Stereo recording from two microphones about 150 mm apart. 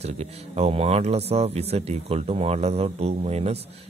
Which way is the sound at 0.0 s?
45° right (ahead or behind).